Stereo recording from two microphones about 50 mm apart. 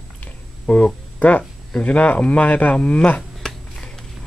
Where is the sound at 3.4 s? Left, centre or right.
Centre.